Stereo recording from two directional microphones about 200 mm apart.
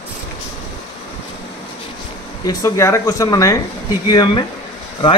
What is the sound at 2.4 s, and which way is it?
A man's voice, 15° left (ahead or behind).